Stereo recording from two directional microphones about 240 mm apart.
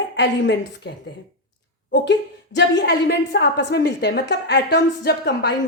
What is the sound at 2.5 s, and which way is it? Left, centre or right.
A woman's voice, left.